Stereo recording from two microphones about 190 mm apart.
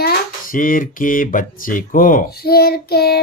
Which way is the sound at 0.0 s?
50° left (ahead or behind).